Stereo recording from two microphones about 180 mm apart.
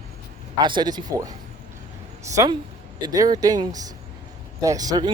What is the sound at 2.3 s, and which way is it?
Speech, 20° right (ahead or behind).